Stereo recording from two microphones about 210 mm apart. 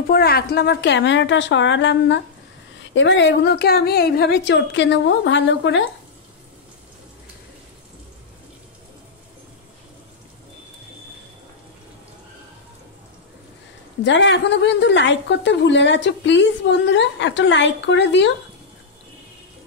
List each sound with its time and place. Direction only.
0.1 s a woman's voice: 50° left (ahead or behind)
14.0 s a woman's voice: 60° left (ahead or behind)